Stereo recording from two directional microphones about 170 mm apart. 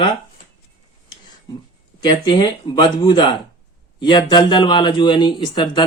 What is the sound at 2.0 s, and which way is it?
Speech, 25° left (ahead or behind).